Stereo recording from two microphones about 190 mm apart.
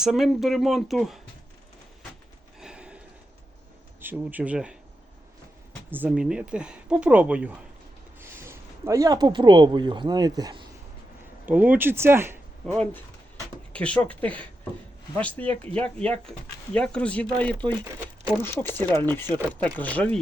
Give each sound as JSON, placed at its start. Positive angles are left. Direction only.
{"t": 0.0, "sound": "speech", "side_deg": 0}
{"t": 2.6, "sound": "a sound", "side_deg": -5}
{"t": 4.0, "sound": "speech", "side_deg": -10}
{"t": 5.9, "sound": "speech", "side_deg": -10}
{"t": 11.4, "sound": "speech", "side_deg": -10}
{"t": 12.6, "sound": "speech", "side_deg": 10}